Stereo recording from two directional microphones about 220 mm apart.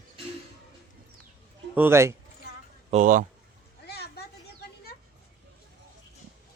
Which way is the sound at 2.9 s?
35° right (ahead or behind).